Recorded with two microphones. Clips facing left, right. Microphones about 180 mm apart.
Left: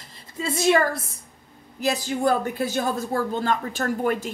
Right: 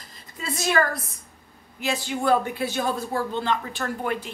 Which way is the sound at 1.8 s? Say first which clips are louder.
Left 3 dB; 40° left (ahead or behind).